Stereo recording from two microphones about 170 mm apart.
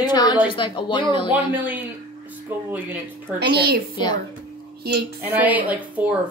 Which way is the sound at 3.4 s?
70° right (ahead or behind).